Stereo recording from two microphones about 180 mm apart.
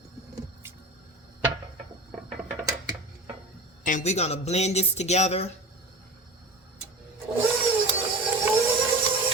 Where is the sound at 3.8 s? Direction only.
40° left (ahead or behind).